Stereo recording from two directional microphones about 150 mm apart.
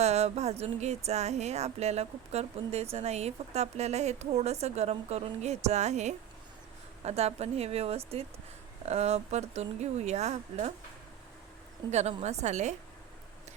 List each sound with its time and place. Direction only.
0.0 s speech: 45° right (ahead or behind)
11.9 s speech: 50° right (ahead or behind)